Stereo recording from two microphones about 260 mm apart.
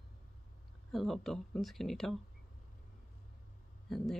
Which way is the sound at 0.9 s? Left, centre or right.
Centre.